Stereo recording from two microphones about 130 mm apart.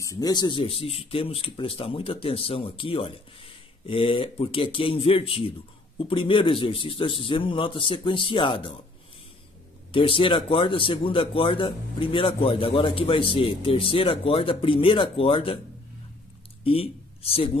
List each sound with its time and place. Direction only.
0.0 s a man's voice: 30° left (ahead or behind)
9.9 s speech: 45° left (ahead or behind)
16.6 s speech: 45° left (ahead or behind)